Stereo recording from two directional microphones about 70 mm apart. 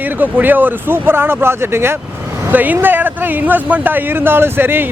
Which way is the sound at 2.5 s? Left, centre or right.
Right.